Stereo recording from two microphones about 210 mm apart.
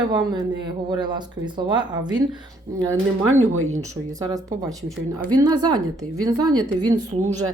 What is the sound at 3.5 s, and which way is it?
Speech, 80° right.